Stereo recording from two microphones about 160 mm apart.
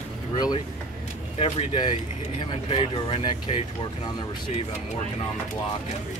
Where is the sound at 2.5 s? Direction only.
35° left (ahead or behind).